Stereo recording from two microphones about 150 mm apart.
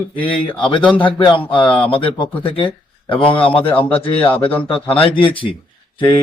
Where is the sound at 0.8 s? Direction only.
10° left (ahead or behind).